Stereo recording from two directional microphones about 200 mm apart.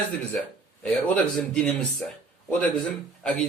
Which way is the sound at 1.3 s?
5° left (ahead or behind).